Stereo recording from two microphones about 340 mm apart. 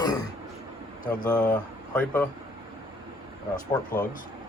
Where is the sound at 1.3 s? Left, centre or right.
Centre.